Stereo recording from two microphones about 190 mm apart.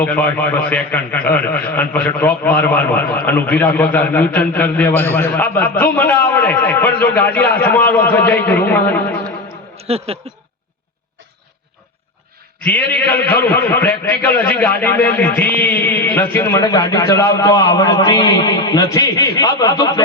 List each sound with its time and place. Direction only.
0.0 s a man's voice: 10° left (ahead or behind)
9.7 s speech: 30° right (ahead or behind)
12.6 s a man's voice: 10° left (ahead or behind)